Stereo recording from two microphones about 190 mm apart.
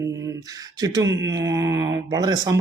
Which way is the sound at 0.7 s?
20° right (ahead or behind).